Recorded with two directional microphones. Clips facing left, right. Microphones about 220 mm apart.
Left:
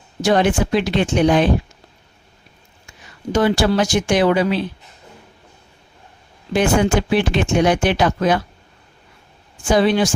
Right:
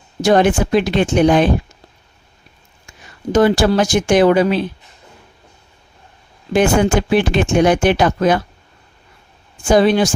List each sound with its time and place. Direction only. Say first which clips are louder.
0.2 s speech: right 3 dB; 45° right (ahead or behind)
3.3 s speech: right 3 dB; 45° right (ahead or behind)
6.5 s speech: right 3 dB; 50° right (ahead or behind)
9.6 s speech: right 3 dB; 45° right (ahead or behind)